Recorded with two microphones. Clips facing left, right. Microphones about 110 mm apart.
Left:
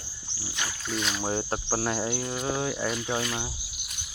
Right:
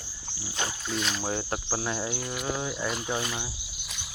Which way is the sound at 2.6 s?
50° left (ahead or behind).